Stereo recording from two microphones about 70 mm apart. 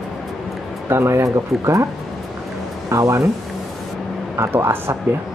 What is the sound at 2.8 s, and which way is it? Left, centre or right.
Speech, right.